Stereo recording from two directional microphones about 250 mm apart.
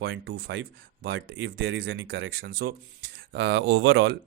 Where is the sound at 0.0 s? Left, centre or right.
Right.